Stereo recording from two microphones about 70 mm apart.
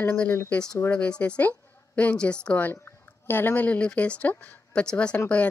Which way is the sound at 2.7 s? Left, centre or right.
Left.